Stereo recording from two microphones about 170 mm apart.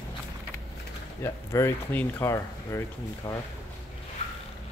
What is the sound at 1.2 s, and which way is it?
Speech, 15° left (ahead or behind).